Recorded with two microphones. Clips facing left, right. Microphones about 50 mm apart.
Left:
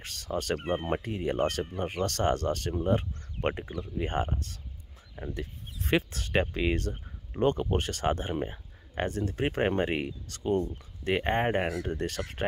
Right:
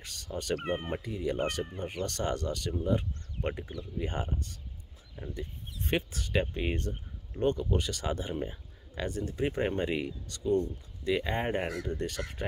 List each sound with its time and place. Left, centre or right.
0.0 s speech: left
5.3 s speech: left